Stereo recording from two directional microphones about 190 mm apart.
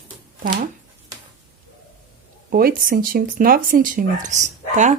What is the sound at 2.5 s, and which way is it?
Speech, 50° right (ahead or behind).